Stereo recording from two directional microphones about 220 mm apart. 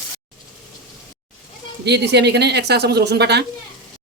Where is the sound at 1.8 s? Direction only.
50° right (ahead or behind).